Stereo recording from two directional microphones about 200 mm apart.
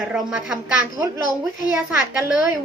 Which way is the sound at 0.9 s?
15° right (ahead or behind).